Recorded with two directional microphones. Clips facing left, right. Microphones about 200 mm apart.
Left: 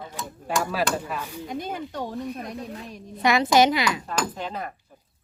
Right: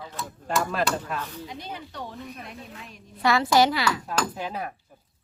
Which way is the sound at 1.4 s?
50° left (ahead or behind).